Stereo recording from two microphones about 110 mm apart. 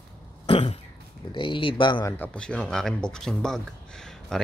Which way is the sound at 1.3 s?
50° left (ahead or behind).